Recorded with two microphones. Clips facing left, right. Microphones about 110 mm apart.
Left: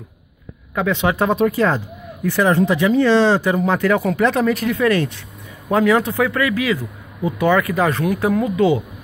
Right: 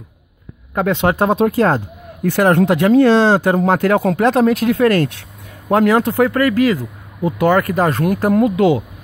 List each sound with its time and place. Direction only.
0.7 s speech: 45° right (ahead or behind)
2.2 s speech: 60° right (ahead or behind)